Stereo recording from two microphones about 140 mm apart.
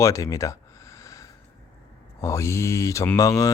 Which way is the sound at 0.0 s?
20° left (ahead or behind).